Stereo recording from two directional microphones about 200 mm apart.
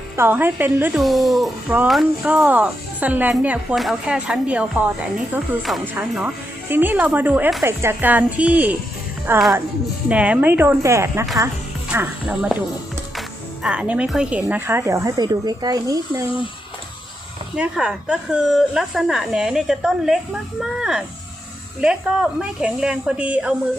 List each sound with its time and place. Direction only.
0.2 s a woman's voice: 10° right (ahead or behind)
17.6 s a woman's voice: 5° right (ahead or behind)